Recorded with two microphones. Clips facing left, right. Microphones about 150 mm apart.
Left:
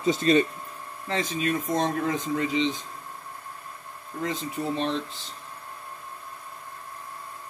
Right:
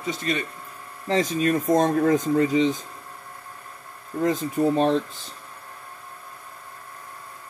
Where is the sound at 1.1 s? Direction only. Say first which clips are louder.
Right 6 dB; 40° right (ahead or behind).